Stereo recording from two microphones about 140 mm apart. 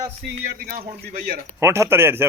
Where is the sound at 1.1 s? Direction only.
90° right.